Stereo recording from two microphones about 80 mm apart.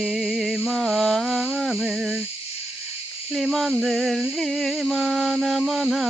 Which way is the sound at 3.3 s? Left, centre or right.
Centre.